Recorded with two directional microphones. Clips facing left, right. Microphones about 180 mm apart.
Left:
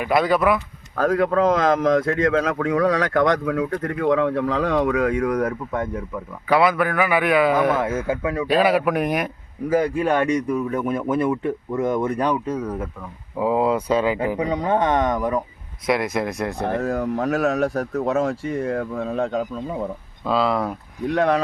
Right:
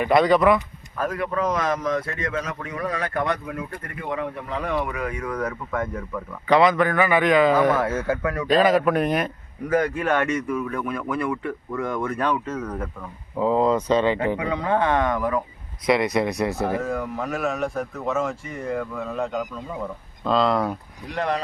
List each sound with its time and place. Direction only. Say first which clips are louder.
0.0 s speech: right 1 dB; 5° left (ahead or behind)
0.9 s speech: left 7 dB; 90° left
6.5 s speech: right 1 dB; 5° left (ahead or behind)
14.5 s speech: left 2 dB; 20° left (ahead or behind)
15.9 s speech: right 1 dB; centre (ahead or behind)
16.8 s speech: left 5 dB; 40° left (ahead or behind)
20.2 s speech: even; 5° left (ahead or behind)